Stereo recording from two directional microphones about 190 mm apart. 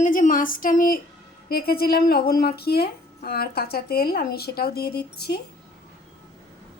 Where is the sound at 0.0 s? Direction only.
45° left (ahead or behind).